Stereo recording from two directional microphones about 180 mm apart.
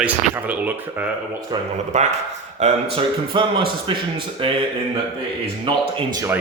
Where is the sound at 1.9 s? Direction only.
40° right (ahead or behind).